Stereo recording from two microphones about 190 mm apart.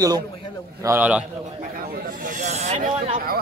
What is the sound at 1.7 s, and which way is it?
Snake, 45° right (ahead or behind).